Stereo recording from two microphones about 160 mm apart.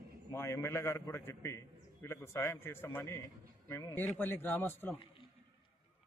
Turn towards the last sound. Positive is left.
turn(degrees=10)  # may be behind; listen again after turning